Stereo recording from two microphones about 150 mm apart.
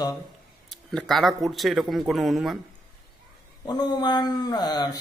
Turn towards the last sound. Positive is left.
turn(degrees=25)  # may be behind; listen again after turning